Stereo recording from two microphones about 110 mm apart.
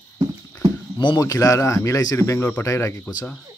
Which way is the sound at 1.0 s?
45° left (ahead or behind).